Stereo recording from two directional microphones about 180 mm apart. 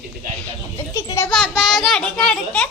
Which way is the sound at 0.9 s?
15° left (ahead or behind).